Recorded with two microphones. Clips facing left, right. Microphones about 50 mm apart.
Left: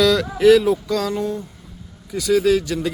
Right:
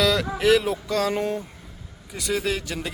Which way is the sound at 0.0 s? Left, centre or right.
Centre.